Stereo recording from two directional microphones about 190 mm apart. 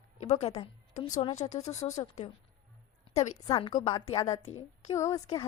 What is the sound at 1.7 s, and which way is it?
Speech, 20° left (ahead or behind).